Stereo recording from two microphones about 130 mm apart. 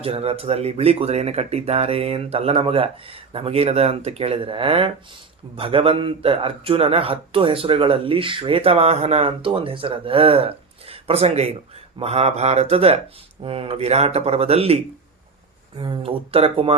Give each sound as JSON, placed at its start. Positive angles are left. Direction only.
{"t": 0.0, "sound": "a man's voice", "side_deg": -50}
{"t": 15.8, "sound": "a man's voice", "side_deg": -45}